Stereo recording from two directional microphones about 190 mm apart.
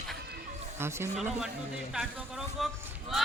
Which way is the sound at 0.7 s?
15° right (ahead or behind).